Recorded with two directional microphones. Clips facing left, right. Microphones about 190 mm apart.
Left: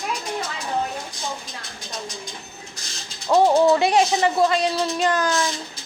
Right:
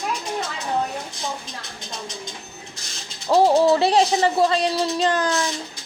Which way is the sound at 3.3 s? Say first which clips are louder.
Even; 30° right (ahead or behind).